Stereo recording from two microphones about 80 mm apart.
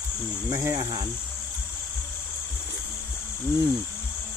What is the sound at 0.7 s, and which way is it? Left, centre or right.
Speech, right.